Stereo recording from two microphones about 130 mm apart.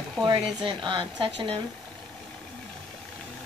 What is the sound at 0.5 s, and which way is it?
A woman's voice, 35° right (ahead or behind).